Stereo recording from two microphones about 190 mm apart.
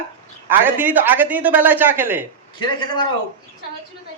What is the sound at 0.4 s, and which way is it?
Speech, 10° right (ahead or behind).